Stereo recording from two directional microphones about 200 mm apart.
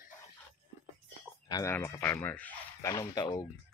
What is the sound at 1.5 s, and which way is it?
Speech, 15° left (ahead or behind).